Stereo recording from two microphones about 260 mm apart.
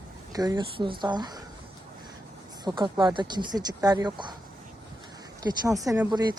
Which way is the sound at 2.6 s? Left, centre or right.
Centre.